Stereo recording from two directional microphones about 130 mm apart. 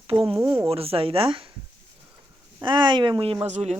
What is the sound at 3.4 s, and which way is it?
Speech, 60° right (ahead or behind).